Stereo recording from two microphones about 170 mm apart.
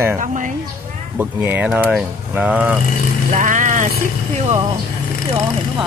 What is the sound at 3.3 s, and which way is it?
Speech, 50° right (ahead or behind).